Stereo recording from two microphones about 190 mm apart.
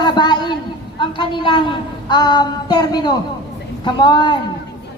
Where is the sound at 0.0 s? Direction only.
25° left (ahead or behind).